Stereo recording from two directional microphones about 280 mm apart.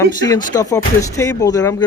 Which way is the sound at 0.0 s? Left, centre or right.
Centre.